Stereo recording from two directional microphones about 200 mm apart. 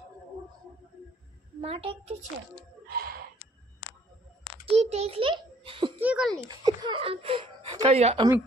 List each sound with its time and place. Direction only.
1.6 s a child's voice: 30° right (ahead or behind)
2.9 s gasp: 50° right (ahead or behind)
4.7 s a child's voice: 30° right (ahead or behind)
5.9 s a child's voice: 5° right (ahead or behind)
6.6 s speech: 25° right (ahead or behind)